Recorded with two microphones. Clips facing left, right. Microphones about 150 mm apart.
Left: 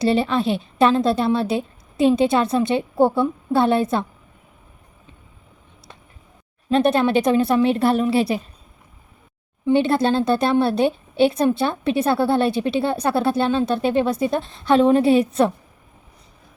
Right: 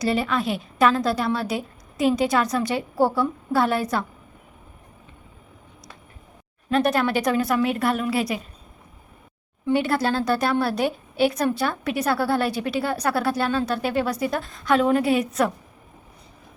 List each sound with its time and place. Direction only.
0.0 s a woman's voice: 30° left (ahead or behind)
6.7 s a woman's voice: 25° left (ahead or behind)
9.6 s a woman's voice: 25° left (ahead or behind)